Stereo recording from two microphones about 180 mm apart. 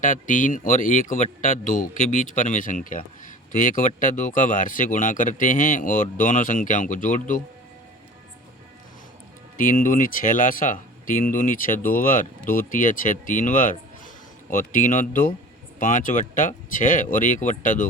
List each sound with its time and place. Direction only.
0.0 s speech: 45° left (ahead or behind)
9.6 s speech: 50° left (ahead or behind)